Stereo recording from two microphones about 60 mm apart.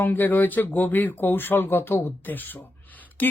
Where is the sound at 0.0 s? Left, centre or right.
Left.